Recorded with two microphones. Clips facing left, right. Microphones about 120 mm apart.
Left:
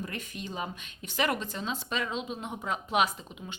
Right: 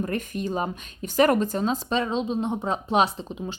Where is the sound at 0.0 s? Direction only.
45° right (ahead or behind).